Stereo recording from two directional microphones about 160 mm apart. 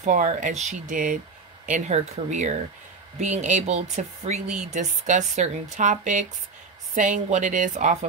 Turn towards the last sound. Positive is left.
turn(degrees=-50)  # may be behind; listen again after turning